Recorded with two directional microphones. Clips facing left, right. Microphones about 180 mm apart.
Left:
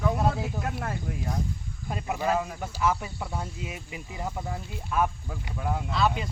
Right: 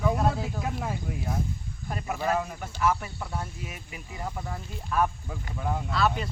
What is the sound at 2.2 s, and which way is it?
Speech, 5° left (ahead or behind).